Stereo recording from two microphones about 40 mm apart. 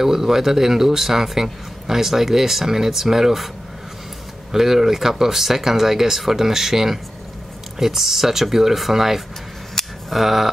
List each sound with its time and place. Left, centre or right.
0.0 s speech: centre
4.5 s speech: centre